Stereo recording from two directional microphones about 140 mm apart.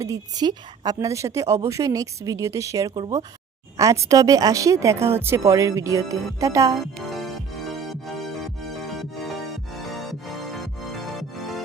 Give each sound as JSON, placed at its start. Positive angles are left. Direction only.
{"t": 0.0, "sound": "a woman's voice", "side_deg": -25}
{"t": 10.9, "sound": "music", "side_deg": 0}